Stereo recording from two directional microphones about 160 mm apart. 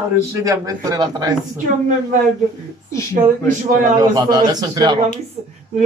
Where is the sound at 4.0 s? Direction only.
25° right (ahead or behind).